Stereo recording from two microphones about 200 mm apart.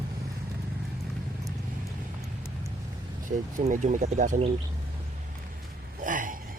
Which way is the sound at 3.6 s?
40° right (ahead or behind).